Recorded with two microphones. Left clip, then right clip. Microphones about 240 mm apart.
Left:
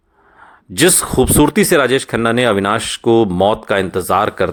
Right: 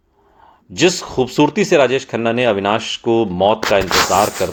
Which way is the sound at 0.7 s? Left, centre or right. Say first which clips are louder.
Left 2 dB; left.